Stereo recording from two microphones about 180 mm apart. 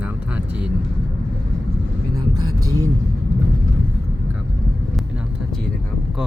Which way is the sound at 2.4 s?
20° right (ahead or behind).